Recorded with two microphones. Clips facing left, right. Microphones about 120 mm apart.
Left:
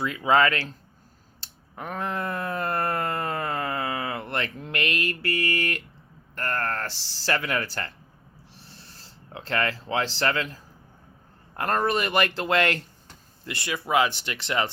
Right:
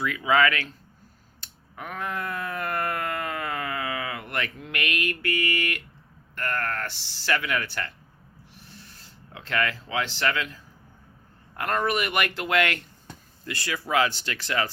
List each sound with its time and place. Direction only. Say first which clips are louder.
0.0 s speech: left 1 dB; 30° left (ahead or behind)
1.4 s a sound: left 2 dB; 35° left (ahead or behind)
6.3 s speech: left 1 dB; 35° left (ahead or behind)
8.5 s a sound: right 2 dB; 35° left (ahead or behind)
11.5 s speech: left 1 dB; 35° left (ahead or behind)
13.4 s speech: even; 20° left (ahead or behind)